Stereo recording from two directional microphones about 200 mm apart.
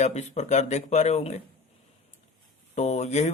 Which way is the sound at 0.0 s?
35° left (ahead or behind).